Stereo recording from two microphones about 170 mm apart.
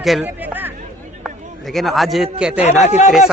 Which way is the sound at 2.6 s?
45° left (ahead or behind).